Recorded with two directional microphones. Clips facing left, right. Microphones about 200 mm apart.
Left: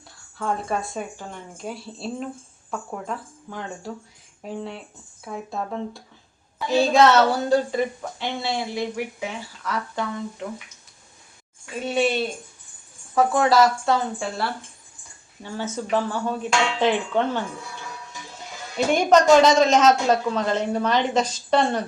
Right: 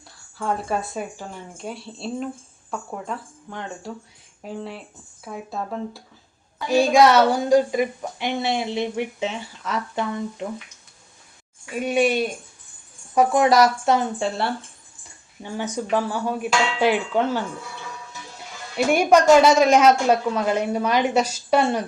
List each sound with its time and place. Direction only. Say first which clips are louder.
0.3 s speech: right 1 dB; centre (ahead or behind)
6.7 s a woman's voice: right 1 dB; 15° right (ahead or behind)
11.7 s a woman's voice: right 2 dB; 10° right (ahead or behind)
18.9 s a woman's voice: right 1 dB; 10° right (ahead or behind)